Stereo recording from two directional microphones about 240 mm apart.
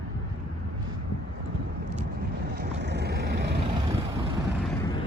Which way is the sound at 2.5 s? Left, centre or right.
Right.